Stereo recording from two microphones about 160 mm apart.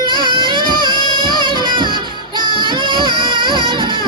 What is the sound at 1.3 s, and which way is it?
Music, 30° right (ahead or behind).